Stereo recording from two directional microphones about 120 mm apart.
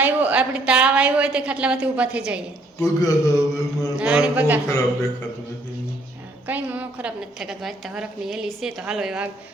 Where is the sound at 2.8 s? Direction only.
30° left (ahead or behind).